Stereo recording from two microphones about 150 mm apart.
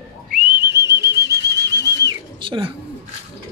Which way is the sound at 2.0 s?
35° right (ahead or behind).